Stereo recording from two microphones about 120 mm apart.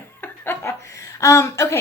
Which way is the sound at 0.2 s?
15° left (ahead or behind).